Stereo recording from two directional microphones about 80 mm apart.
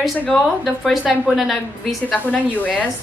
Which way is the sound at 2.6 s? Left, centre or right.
Centre.